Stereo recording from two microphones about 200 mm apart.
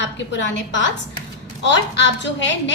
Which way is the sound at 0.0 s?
65° left (ahead or behind).